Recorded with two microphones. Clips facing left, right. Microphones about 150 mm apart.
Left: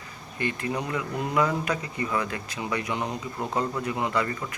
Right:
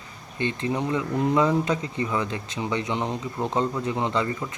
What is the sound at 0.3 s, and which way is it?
Speech, 25° right (ahead or behind).